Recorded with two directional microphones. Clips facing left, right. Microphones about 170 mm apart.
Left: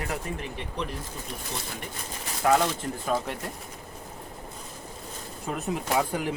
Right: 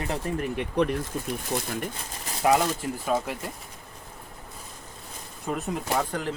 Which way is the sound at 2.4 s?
15° right (ahead or behind).